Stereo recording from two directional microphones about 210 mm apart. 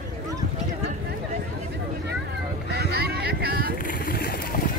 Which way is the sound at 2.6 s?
50° right (ahead or behind).